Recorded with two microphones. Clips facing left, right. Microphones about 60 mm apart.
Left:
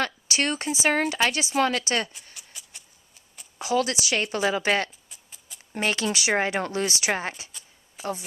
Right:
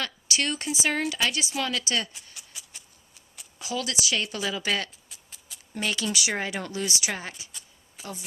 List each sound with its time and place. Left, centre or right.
0.0 s speech: left
2.3 s a sound: centre
3.6 s speech: left